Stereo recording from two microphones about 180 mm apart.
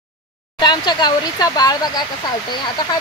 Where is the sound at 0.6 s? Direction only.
25° left (ahead or behind).